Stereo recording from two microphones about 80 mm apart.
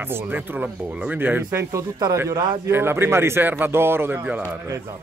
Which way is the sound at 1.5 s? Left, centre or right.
Right.